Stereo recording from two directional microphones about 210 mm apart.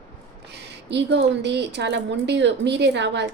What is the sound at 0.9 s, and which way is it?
A woman's voice, 55° right (ahead or behind).